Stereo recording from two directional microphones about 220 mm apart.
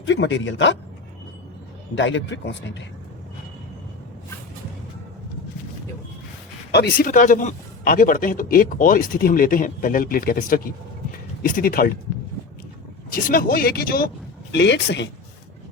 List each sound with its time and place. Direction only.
0.0 s a man's voice: 55° left (ahead or behind)
2.0 s a man's voice: 55° left (ahead or behind)
6.7 s a man's voice: 45° left (ahead or behind)
13.1 s a man's voice: 40° left (ahead or behind)